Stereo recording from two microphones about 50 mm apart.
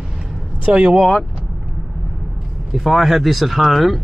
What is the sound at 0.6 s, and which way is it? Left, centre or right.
Speech, centre.